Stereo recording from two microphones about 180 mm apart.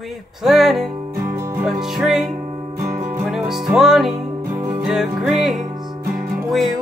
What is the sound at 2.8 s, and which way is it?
Music, 15° right (ahead or behind).